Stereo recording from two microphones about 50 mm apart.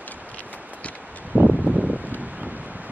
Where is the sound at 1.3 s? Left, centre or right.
Right.